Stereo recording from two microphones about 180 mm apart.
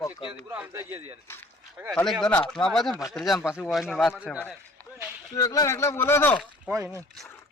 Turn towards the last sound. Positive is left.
turn(degrees=-15)  # may be behind; listen again after turning